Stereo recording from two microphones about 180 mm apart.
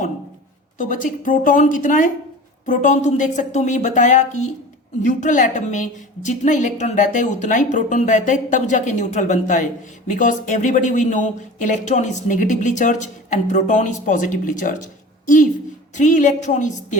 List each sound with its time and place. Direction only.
0.8 s a woman's voice: 45° left (ahead or behind)
16.0 s speech: 45° left (ahead or behind)